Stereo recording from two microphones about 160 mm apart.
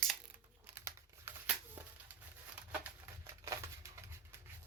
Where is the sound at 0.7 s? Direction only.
15° right (ahead or behind).